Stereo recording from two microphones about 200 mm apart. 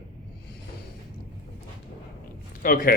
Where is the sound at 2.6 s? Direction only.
45° left (ahead or behind).